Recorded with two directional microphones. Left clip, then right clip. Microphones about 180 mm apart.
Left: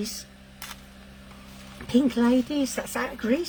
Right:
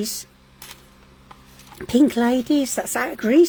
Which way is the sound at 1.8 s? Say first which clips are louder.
Right 5 dB; 55° right (ahead or behind).